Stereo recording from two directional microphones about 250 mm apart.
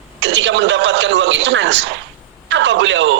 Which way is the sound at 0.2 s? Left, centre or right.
Right.